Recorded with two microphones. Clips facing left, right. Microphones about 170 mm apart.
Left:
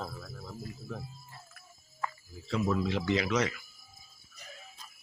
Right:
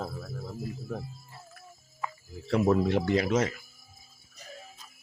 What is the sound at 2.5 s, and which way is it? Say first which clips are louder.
Speech: right 6 dB; 60° right (ahead or behind).